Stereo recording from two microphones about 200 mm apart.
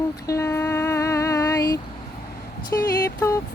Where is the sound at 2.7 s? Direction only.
10° left (ahead or behind).